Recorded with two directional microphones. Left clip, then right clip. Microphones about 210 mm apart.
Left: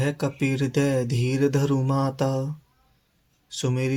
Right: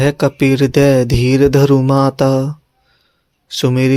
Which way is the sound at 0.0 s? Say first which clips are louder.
Right 13 dB; 45° right (ahead or behind).